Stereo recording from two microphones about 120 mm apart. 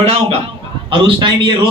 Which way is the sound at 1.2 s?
40° right (ahead or behind).